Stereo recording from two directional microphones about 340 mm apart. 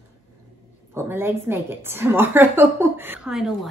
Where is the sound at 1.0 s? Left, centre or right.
Centre.